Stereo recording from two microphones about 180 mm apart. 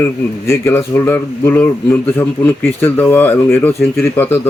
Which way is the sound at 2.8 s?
10° left (ahead or behind).